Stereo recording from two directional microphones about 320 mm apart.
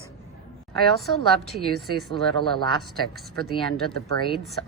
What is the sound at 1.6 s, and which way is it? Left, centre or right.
Speech, right.